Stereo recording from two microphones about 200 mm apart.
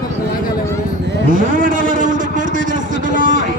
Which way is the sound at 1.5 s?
40° right (ahead or behind).